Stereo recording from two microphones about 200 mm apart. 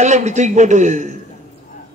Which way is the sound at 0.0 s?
35° right (ahead or behind).